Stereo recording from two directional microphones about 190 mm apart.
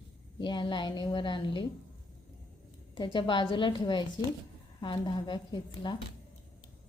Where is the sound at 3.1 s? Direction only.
25° left (ahead or behind).